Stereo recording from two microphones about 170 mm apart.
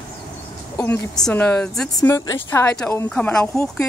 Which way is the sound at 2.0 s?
20° left (ahead or behind).